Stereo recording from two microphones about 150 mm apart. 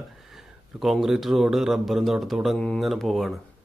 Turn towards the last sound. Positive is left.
turn(degrees=0)  # may be behind; listen again after turning